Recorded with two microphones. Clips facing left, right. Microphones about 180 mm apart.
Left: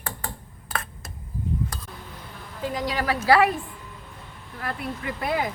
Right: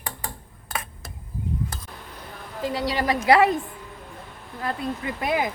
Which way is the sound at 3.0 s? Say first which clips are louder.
Right 1 dB; 15° right (ahead or behind).